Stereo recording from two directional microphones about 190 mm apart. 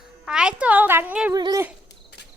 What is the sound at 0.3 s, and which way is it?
A woman's voice, 5° right (ahead or behind).